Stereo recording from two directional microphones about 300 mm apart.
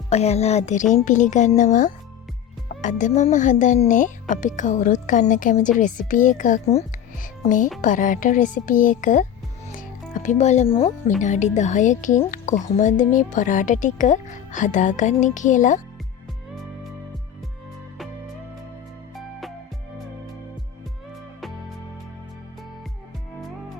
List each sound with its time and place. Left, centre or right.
0.1 s speech: left
9.7 s music: left
11.2 s speech: left
19.1 s music: centre